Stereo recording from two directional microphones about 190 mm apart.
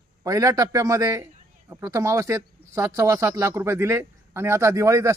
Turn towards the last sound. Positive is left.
turn(degrees=-15)  # may be behind; listen again after turning